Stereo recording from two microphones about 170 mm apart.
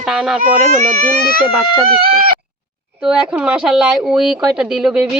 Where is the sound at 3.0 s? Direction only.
5° right (ahead or behind).